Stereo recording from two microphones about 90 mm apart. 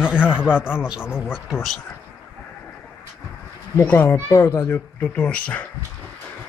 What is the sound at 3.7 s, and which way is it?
Speech, 25° left (ahead or behind).